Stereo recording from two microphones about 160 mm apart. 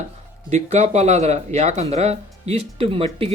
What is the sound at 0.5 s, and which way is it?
Speech, 45° right (ahead or behind).